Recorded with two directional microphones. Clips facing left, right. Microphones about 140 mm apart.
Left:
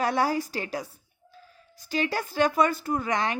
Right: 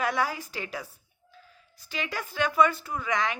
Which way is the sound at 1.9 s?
35° left (ahead or behind).